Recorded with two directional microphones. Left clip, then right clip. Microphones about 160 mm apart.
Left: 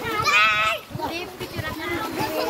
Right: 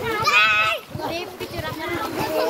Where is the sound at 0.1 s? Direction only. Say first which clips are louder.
Right 1 dB; 15° left (ahead or behind).